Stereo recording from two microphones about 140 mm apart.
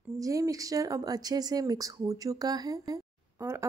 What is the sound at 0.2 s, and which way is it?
Speech, 25° right (ahead or behind).